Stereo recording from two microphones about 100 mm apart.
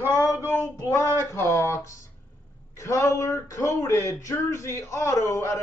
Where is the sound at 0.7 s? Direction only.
25° left (ahead or behind).